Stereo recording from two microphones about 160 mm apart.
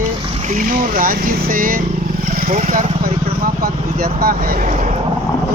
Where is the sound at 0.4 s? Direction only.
55° right (ahead or behind).